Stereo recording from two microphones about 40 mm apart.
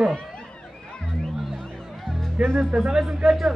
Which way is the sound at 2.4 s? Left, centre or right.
Centre.